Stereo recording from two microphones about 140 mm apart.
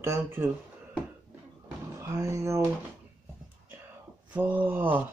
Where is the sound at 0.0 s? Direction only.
20° right (ahead or behind).